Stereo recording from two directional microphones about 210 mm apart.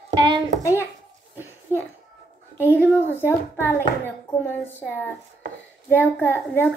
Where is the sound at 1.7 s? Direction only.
10° right (ahead or behind).